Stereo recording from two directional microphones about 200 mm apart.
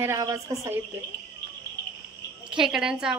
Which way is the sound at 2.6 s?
5° right (ahead or behind).